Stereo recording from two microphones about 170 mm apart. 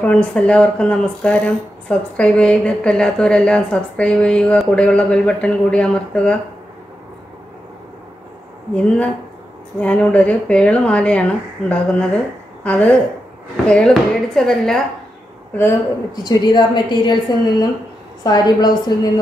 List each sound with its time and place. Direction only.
0.0 s a woman's voice: 5° left (ahead or behind)
8.7 s a woman's voice: 5° left (ahead or behind)
15.5 s speech: 15° left (ahead or behind)
16.3 s a woman's voice: 25° left (ahead or behind)